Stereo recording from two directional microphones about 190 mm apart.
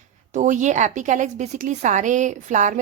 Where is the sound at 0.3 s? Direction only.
40° right (ahead or behind).